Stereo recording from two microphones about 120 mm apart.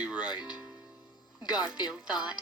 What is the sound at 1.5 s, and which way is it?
Speech, 35° left (ahead or behind).